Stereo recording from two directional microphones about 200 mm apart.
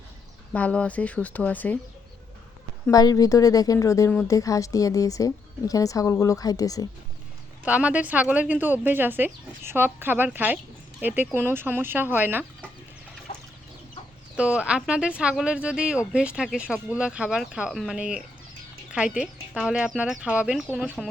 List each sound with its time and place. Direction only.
0.5 s a woman's voice: 5° left (ahead or behind)
2.9 s a woman's voice: 20° left (ahead or behind)
7.6 s a woman's voice: 5° right (ahead or behind)
14.3 s speech: 5° right (ahead or behind)